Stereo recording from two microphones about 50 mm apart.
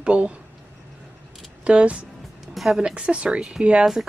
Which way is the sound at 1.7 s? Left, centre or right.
Right.